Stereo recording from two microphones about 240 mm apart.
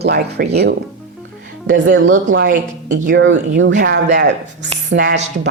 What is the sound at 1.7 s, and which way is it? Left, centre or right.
A woman's voice, right.